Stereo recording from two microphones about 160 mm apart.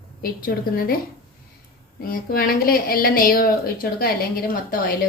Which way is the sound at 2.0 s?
70° left (ahead or behind).